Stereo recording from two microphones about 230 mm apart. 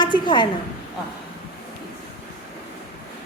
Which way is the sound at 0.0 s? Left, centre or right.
Centre.